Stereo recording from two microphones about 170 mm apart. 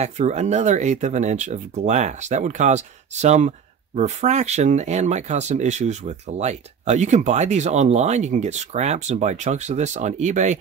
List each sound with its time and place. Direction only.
0.0 s speech: 45° right (ahead or behind)